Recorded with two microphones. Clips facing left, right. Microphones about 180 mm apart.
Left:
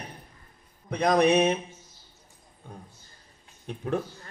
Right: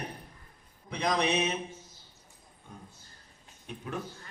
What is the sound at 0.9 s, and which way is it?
Speech, 50° left (ahead or behind).